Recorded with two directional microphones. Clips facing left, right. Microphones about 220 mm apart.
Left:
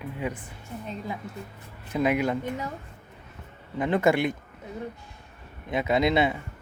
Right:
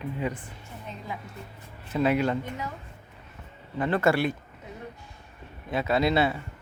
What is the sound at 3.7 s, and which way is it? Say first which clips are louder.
Speech: left 1 dB; 15° left (ahead or behind).